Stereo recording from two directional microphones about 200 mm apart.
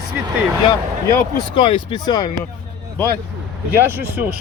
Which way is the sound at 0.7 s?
20° left (ahead or behind).